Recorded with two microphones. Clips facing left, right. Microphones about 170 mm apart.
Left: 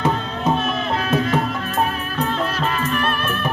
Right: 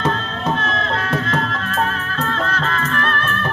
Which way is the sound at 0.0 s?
10° left (ahead or behind).